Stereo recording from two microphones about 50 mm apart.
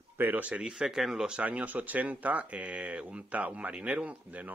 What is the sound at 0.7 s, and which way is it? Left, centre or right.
Speech, centre.